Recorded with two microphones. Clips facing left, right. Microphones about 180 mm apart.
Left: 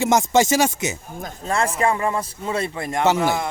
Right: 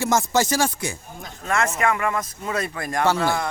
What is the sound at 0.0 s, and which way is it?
Speech, 20° left (ahead or behind).